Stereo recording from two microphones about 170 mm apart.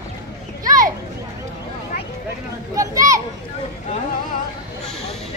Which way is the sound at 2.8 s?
20° right (ahead or behind).